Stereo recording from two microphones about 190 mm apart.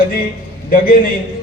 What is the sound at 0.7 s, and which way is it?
Speech, 50° left (ahead or behind).